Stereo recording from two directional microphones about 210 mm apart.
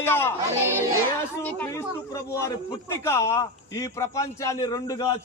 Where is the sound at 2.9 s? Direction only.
15° left (ahead or behind).